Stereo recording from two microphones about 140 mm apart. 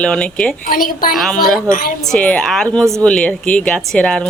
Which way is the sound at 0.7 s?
90° left.